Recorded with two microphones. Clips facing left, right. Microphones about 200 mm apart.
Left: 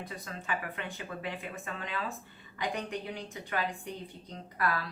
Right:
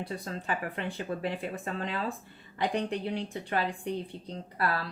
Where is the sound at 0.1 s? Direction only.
35° right (ahead or behind).